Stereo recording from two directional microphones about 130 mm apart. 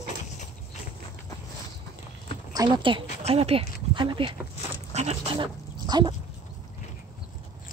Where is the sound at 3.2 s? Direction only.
50° right (ahead or behind).